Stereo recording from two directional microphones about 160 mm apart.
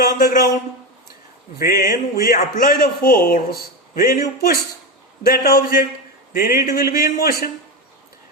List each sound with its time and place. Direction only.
0.2 s a man's voice: 70° left (ahead or behind)
1.5 s a man's voice: 65° left (ahead or behind)